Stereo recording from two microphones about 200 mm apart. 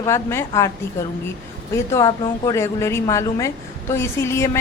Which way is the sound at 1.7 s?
15° left (ahead or behind).